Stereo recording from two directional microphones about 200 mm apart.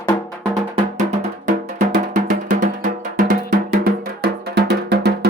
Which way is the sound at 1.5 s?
40° right (ahead or behind).